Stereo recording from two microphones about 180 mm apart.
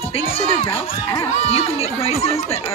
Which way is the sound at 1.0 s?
15° left (ahead or behind).